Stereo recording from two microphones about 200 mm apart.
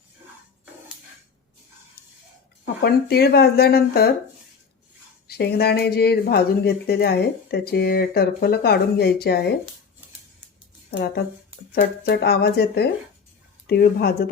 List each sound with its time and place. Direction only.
2.8 s speech: 55° left (ahead or behind)
5.3 s speech: 55° left (ahead or behind)
10.9 s speech: 50° left (ahead or behind)